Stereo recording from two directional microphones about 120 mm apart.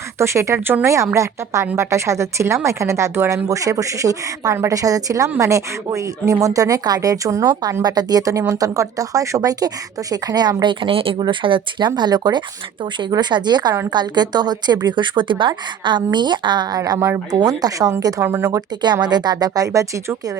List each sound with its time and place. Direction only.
0.2 s speech: 25° right (ahead or behind)
18.8 s speech: 35° right (ahead or behind)